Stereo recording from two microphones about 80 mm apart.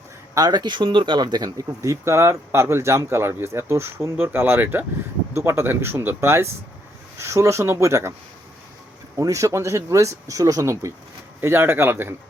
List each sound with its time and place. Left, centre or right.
0.3 s speech: right
1.6 s speech: right
9.1 s speech: right
11.3 s speech: right